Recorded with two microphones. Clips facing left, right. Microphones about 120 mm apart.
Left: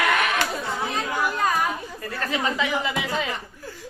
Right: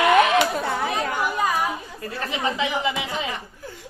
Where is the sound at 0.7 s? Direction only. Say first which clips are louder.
Right 3 dB; 60° right (ahead or behind).